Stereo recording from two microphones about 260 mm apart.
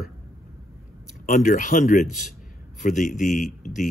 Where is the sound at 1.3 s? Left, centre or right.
Left.